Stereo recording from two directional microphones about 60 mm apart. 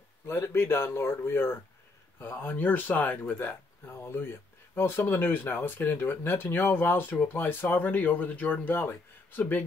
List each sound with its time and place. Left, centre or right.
0.3 s speech: left